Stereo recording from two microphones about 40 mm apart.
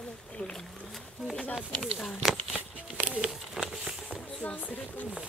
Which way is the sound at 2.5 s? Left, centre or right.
Right.